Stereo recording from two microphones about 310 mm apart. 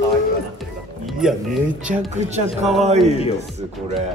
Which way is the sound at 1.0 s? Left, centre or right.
Centre.